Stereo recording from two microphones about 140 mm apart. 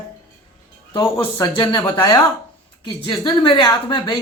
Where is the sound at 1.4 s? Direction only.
35° left (ahead or behind).